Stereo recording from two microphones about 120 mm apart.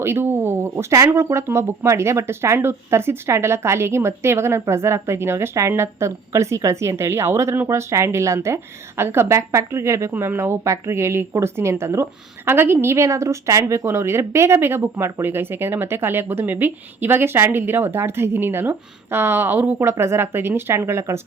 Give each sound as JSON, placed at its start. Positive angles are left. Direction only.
{"t": 0.0, "sound": "speech", "side_deg": -20}